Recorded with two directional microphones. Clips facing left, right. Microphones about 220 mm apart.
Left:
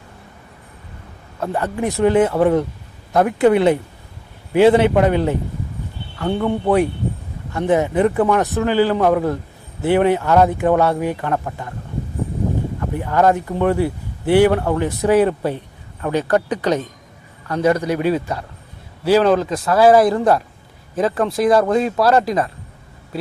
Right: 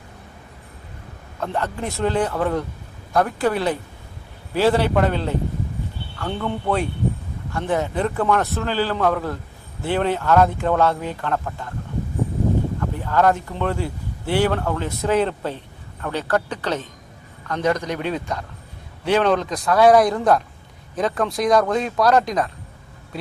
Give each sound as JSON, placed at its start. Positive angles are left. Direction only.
{"t": 1.4, "sound": "a woman's voice", "side_deg": 15}
{"t": 12.8, "sound": "speech", "side_deg": 15}